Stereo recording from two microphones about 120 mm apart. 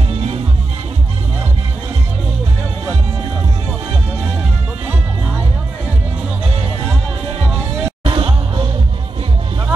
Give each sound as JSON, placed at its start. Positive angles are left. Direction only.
{"t": 8.0, "sound": "music", "side_deg": -45}